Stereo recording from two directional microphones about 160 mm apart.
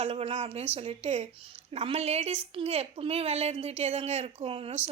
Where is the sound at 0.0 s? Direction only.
40° right (ahead or behind).